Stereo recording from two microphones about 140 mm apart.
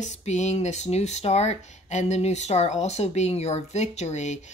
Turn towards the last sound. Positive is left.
turn(degrees=55)  # may be behind; listen again after turning